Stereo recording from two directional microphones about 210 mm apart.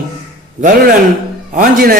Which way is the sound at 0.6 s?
45° right (ahead or behind).